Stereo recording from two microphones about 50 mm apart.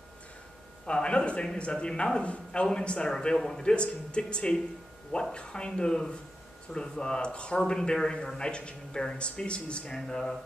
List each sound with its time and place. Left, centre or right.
0.8 s a man's voice: left
9.9 s a man's voice: centre